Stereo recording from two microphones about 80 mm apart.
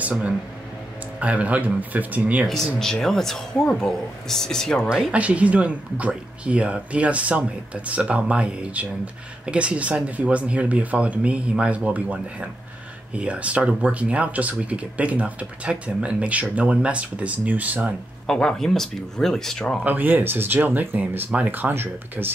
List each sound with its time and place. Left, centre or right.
1.2 s speech: centre
2.4 s speech: centre
4.8 s speech: centre
18.2 s speech: centre
19.8 s speech: right